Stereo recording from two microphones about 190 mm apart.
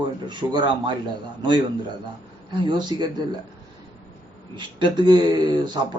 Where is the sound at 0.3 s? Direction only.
25° right (ahead or behind).